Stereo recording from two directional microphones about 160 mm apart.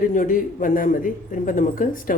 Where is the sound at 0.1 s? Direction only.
55° left (ahead or behind).